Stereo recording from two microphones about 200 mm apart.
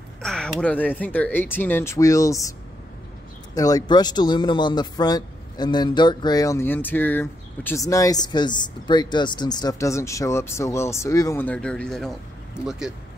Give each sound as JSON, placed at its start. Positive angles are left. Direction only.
{"t": 0.2, "sound": "speech", "side_deg": 5}
{"t": 3.5, "sound": "speech", "side_deg": 20}